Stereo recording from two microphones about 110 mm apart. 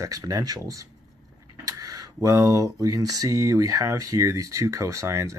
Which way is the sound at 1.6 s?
30° right (ahead or behind).